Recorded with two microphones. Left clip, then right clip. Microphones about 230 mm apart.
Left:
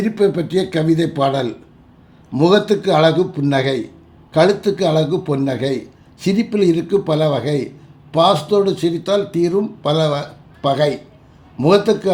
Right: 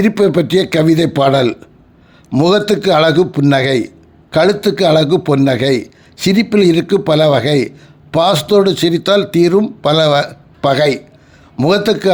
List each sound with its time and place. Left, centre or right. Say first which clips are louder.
0.0 s a man's voice: right 5 dB; right